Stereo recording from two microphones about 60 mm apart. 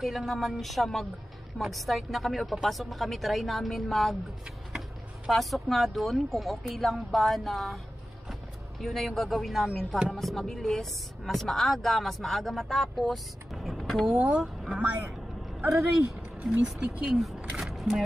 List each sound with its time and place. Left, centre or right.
0.0 s speech: centre
5.3 s speech: centre
14.1 s speech: right
14.4 s speech: centre
16.6 s speech: centre
17.6 s single-lens reflex camera: centre